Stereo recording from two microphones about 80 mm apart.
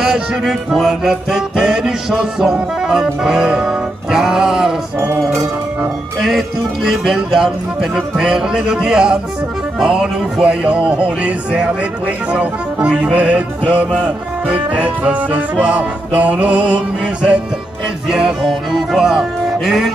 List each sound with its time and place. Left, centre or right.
0.0 s music: centre
6.1 s speech: centre
18.0 s music: centre